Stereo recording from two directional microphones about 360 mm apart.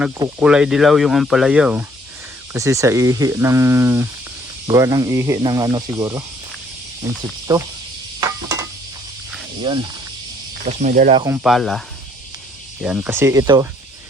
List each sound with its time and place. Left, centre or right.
0.0 s speech: centre
8.2 s a sound: centre
9.7 s speech: centre
11.4 s speech: centre
12.8 s speech: centre